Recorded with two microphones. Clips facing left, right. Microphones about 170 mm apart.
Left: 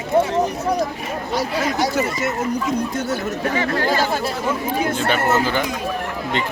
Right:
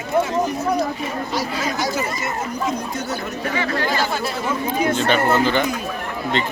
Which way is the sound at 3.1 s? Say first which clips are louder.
Left 3 dB; 45° left (ahead or behind).